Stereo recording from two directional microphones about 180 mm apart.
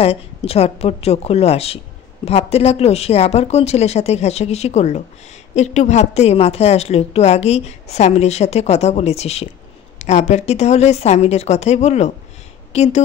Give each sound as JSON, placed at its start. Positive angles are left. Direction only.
{"t": 0.0, "sound": "a woman's voice", "side_deg": 35}